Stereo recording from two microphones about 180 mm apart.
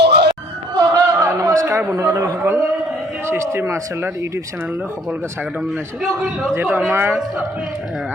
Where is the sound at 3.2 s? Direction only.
15° right (ahead or behind).